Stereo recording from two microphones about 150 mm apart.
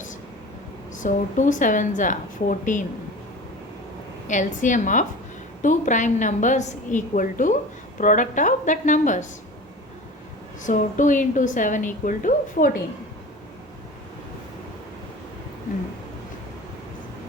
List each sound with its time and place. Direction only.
0.9 s a woman's voice: 60° left (ahead or behind)
4.3 s a woman's voice: 55° left (ahead or behind)
10.6 s a woman's voice: 55° left (ahead or behind)